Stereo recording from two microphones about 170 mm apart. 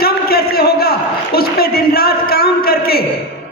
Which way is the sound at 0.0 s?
65° left (ahead or behind).